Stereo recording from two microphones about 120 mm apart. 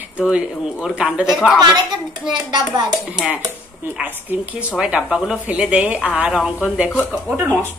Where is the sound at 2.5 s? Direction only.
35° right (ahead or behind).